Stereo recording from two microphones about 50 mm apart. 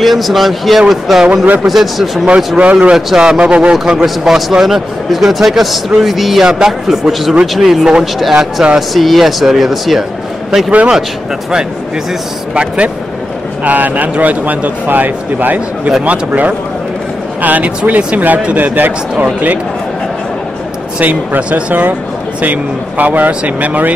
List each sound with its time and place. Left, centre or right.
0.0 s a man's voice: centre
1.4 s speech: right
1.7 s a man's voice: centre
2.2 s speech: right
3.1 s a man's voice: centre
3.7 s a man's voice: centre
12.5 s speech: right
13.7 s a man's voice: right
21.0 s a man's voice: right